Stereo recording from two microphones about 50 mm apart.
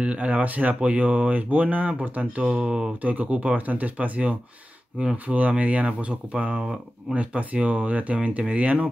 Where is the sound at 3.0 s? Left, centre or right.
Right.